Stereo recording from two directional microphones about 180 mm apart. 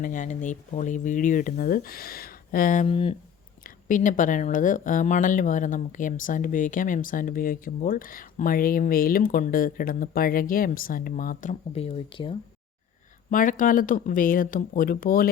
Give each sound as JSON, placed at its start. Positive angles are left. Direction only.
{"t": 0.0, "sound": "speech", "side_deg": 45}
{"t": 2.8, "sound": "speech", "side_deg": 30}
{"t": 3.6, "sound": "speech", "side_deg": 45}
{"t": 11.7, "sound": "speech", "side_deg": 35}
{"t": 13.3, "sound": "speech", "side_deg": 45}